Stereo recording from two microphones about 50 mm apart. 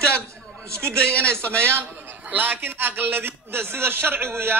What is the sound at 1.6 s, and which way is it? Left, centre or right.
Speech, right.